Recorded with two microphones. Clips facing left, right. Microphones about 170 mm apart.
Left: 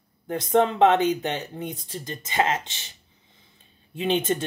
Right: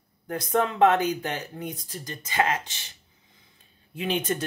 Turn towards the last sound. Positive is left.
turn(degrees=25)  # may be behind; listen again after turning